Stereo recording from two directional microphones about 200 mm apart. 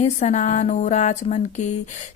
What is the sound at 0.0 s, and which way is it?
A woman's voice, 35° left (ahead or behind).